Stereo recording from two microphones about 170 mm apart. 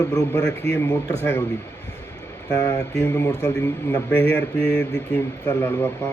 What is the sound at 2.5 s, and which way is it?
Speech, 20° left (ahead or behind).